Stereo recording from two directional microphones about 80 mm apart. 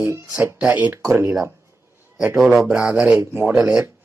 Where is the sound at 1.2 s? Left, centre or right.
Right.